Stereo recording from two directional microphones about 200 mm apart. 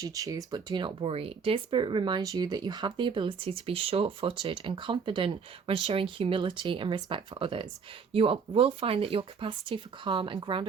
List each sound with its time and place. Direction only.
0.0 s speech: 15° right (ahead or behind)